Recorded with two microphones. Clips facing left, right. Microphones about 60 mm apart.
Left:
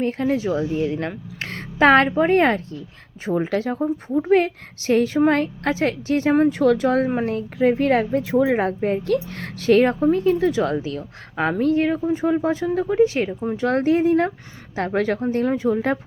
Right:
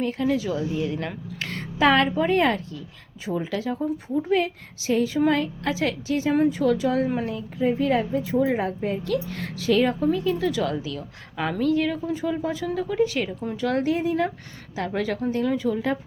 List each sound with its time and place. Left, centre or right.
0.0 s a woman's voice: left
7.3 s a woman's voice: left